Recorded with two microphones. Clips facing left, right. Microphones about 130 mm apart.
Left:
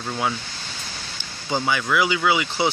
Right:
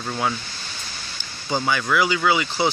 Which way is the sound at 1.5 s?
20° left (ahead or behind).